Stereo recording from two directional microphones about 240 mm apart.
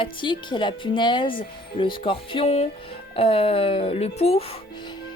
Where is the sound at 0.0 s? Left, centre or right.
Centre.